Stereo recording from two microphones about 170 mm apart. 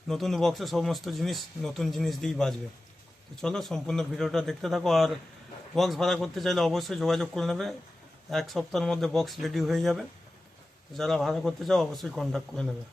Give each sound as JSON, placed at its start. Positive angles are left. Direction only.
{"t": 0.1, "sound": "speech", "side_deg": 0}